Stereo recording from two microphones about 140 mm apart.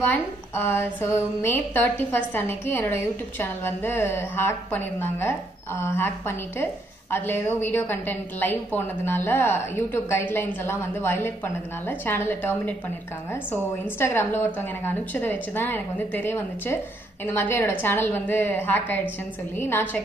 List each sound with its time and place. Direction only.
0.0 s a woman's voice: 15° left (ahead or behind)